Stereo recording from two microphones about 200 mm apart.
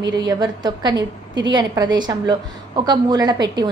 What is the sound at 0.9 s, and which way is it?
Speech, 65° right (ahead or behind).